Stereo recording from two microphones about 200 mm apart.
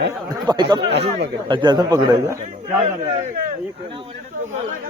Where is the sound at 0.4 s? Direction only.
20° right (ahead or behind).